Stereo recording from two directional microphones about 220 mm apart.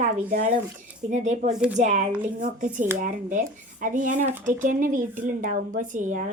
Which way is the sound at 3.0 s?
35° right (ahead or behind).